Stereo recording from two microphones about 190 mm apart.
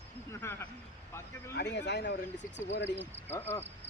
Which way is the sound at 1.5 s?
65° left (ahead or behind).